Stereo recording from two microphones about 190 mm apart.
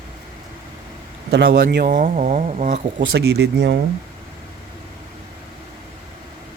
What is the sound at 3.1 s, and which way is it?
Speech, 60° right (ahead or behind).